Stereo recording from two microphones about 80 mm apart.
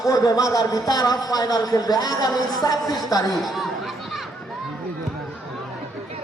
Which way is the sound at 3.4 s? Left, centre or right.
Centre.